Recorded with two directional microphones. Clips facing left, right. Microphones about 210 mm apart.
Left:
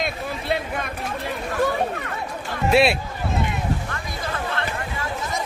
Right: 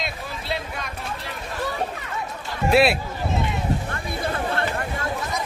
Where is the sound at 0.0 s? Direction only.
55° left (ahead or behind).